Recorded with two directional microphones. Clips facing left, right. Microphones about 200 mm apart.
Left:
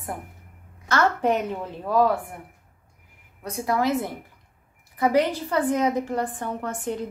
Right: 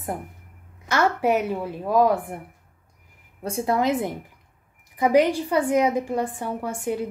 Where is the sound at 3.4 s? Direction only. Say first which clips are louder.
Right 2 dB; 25° right (ahead or behind).